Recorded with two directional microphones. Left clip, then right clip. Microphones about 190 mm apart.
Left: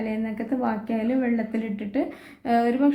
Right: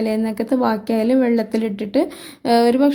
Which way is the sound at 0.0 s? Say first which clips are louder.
Right 9 dB; 60° right (ahead or behind).